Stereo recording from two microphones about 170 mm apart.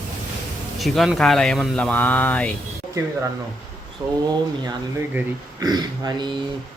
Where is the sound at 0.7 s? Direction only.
Centre (ahead or behind).